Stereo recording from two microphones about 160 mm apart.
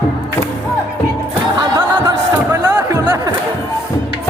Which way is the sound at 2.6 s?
25° right (ahead or behind).